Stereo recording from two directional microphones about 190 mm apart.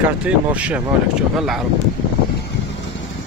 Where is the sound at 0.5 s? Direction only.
10° right (ahead or behind).